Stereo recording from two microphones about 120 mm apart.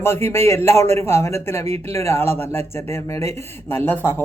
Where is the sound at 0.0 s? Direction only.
20° left (ahead or behind).